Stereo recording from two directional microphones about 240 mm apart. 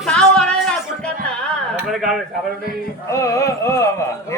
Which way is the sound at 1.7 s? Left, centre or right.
Centre.